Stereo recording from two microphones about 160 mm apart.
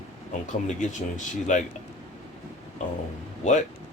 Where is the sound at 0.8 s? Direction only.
50° left (ahead or behind).